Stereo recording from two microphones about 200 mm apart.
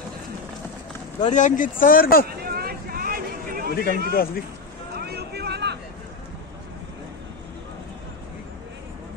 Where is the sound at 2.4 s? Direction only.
50° right (ahead or behind).